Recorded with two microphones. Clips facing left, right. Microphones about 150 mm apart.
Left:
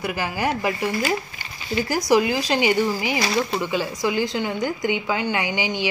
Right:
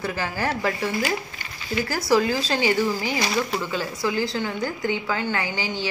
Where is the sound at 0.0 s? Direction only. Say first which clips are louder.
Left 2 dB; 15° left (ahead or behind).